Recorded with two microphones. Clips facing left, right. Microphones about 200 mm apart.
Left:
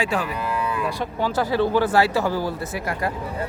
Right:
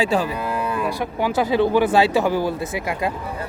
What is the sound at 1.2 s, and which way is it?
Speech, 15° right (ahead or behind).